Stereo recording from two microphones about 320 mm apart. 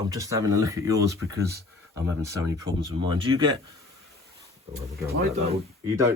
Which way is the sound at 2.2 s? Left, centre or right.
Centre.